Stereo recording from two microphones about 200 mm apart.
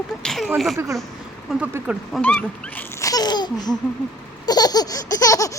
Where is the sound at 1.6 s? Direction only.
5° right (ahead or behind).